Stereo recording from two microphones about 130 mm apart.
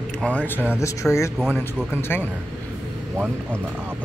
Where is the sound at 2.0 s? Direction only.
15° left (ahead or behind).